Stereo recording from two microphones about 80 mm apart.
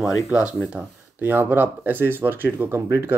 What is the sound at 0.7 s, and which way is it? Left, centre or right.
Speech, right.